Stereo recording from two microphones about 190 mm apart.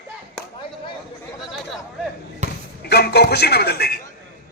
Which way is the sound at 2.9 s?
60° left (ahead or behind).